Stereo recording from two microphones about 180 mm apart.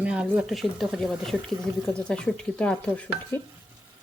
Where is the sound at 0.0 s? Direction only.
5° right (ahead or behind).